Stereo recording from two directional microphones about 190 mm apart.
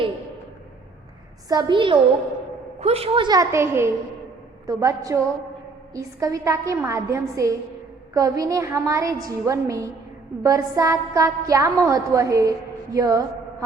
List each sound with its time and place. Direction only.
1.5 s a woman's voice: 25° right (ahead or behind)